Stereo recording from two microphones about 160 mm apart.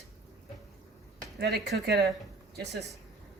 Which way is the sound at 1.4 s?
90° right.